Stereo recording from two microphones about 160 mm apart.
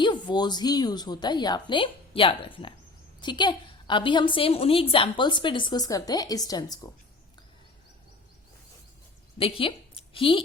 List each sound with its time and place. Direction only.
0.0 s a woman's voice: 30° left (ahead or behind)
9.4 s speech: 35° left (ahead or behind)